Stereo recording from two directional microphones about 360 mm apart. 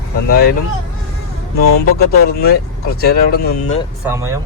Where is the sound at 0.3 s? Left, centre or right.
Left.